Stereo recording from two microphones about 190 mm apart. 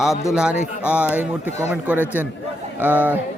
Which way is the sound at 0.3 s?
5° right (ahead or behind).